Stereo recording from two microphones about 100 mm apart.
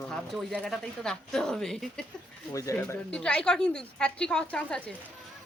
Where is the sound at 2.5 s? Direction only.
30° left (ahead or behind).